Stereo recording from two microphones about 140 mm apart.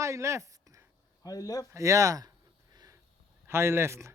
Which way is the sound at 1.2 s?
25° left (ahead or behind).